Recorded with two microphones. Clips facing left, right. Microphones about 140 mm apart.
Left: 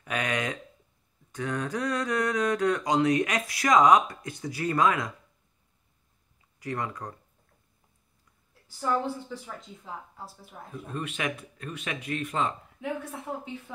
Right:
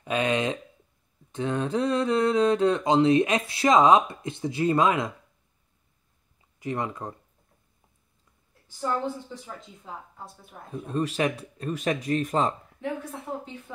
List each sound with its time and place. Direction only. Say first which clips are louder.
0.0 s mantra: right 5 dB; 25° right (ahead or behind)
6.6 s mantra: right 3 dB; 20° right (ahead or behind)
8.7 s a woman's voice: even; centre (ahead or behind)
10.9 s speech: right 7 dB; 35° right (ahead or behind)